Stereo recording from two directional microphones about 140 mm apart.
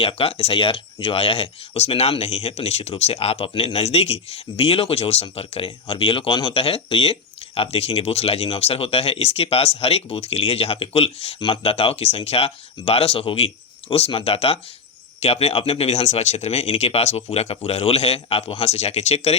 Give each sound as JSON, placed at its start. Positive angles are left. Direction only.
{"t": 0.0, "sound": "speech", "side_deg": 40}